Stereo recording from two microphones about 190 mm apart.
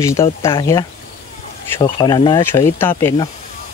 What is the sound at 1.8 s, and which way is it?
Speech, 25° left (ahead or behind).